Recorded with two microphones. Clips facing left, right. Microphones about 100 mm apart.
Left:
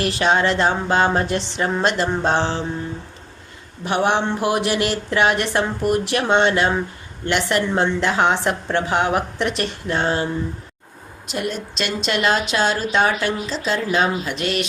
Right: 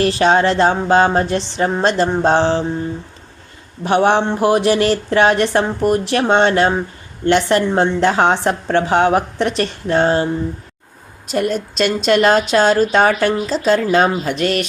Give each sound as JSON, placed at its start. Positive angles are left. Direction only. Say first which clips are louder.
{"t": 0.0, "sound": "a woman's voice", "louder": "right 5 dB", "side_deg": -35}
{"t": 3.8, "sound": "a woman's voice", "louder": "right 5 dB", "side_deg": -35}
{"t": 11.3, "sound": "speech", "louder": "right 7 dB", "side_deg": -45}